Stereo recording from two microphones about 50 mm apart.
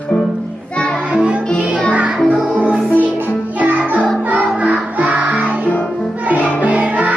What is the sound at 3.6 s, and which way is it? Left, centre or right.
Music, right.